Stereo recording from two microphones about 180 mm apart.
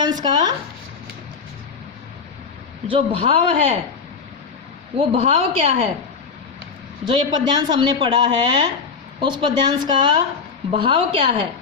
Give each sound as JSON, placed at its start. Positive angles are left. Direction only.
{"t": 0.0, "sound": "speech", "side_deg": -20}
{"t": 2.9, "sound": "speech", "side_deg": -30}
{"t": 4.9, "sound": "speech", "side_deg": -30}
{"t": 7.1, "sound": "speech", "side_deg": -25}